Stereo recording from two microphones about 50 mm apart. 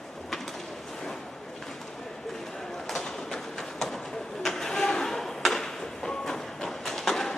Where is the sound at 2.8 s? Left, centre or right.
Centre.